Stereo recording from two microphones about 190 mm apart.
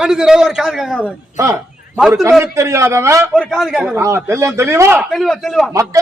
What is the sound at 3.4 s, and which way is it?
Speech, centre (ahead or behind).